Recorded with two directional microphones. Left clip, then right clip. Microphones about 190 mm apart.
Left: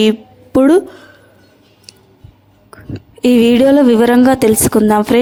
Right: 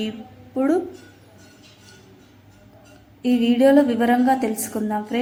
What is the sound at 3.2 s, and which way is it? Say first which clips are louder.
A woman's voice: left 9 dB; 50° left (ahead or behind).